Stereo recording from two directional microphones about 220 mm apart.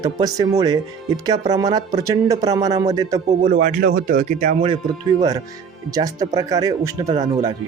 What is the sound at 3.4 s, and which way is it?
Speech, 40° right (ahead or behind).